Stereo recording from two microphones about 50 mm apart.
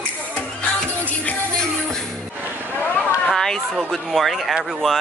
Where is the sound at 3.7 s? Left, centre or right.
Centre.